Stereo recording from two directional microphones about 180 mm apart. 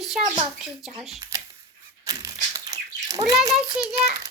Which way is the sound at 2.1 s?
20° right (ahead or behind).